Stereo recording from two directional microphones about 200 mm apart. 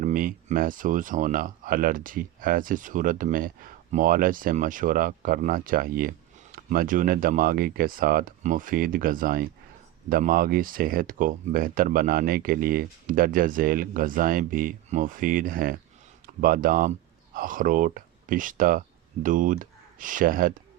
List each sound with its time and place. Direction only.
0.0 s speech: 45° right (ahead or behind)